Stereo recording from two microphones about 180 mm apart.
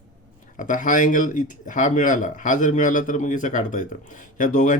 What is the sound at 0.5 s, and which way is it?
Speech, 45° left (ahead or behind).